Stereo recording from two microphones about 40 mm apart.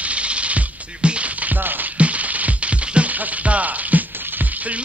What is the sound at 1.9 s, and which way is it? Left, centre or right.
Music, right.